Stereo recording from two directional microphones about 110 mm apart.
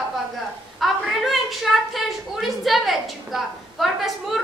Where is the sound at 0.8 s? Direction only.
Centre (ahead or behind).